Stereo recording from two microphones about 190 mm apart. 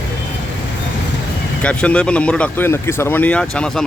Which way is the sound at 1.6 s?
5° left (ahead or behind).